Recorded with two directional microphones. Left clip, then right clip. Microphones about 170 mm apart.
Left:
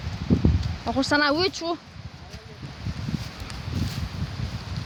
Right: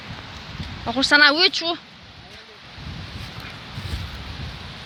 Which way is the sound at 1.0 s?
15° left (ahead or behind).